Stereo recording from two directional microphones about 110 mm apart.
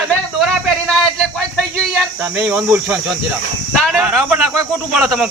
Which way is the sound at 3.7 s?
5° left (ahead or behind).